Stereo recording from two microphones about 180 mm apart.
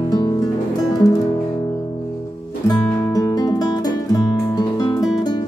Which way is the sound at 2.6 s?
20° left (ahead or behind).